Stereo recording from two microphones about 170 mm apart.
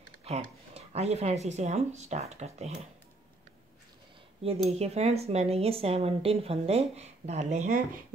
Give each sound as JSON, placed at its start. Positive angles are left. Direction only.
{"t": 0.7, "sound": "speech", "side_deg": -40}
{"t": 4.4, "sound": "speech", "side_deg": -35}